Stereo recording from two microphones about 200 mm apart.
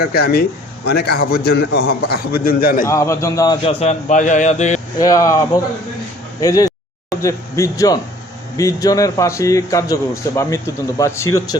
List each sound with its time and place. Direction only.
0.0 s a man's voice: 50° left (ahead or behind)
2.8 s speech: 15° left (ahead or behind); by 4.8 s 35° left (ahead or behind)
4.9 s a man's voice: 15° left (ahead or behind)
6.4 s a man's voice: 15° left (ahead or behind)